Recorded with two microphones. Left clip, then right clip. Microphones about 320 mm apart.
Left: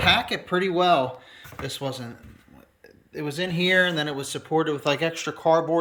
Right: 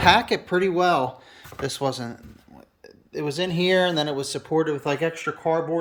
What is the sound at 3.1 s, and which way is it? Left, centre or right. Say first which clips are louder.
Speech: right 2 dB; centre.